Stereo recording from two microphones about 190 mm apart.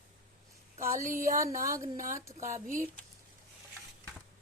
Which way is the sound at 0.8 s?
15° right (ahead or behind).